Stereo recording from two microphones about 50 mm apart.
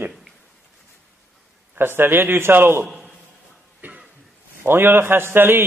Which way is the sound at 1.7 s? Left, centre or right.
Right.